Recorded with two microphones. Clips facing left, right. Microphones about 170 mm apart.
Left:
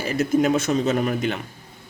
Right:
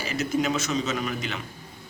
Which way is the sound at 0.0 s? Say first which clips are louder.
Left 6 dB; 50° left (ahead or behind).